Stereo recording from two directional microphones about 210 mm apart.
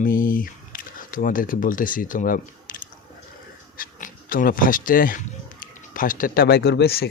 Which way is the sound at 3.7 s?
40° left (ahead or behind).